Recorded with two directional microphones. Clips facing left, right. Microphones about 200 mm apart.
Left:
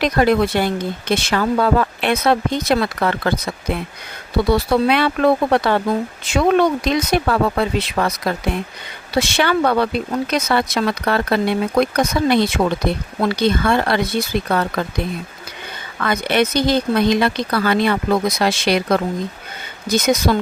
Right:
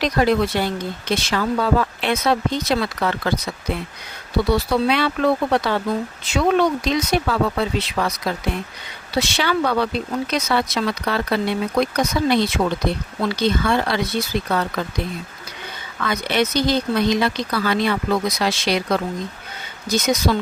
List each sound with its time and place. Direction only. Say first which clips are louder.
0.0 s speech: left 3 dB; 55° left (ahead or behind)
4.5 s speech: left 3 dB; 55° left (ahead or behind)
16.0 s speech: left 3 dB; 55° left (ahead or behind)